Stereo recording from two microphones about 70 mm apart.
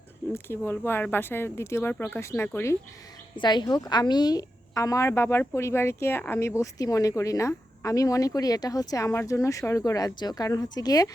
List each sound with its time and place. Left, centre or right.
0.3 s speech: left
3.4 s speech: left
6.7 s speech: left
9.0 s speech: left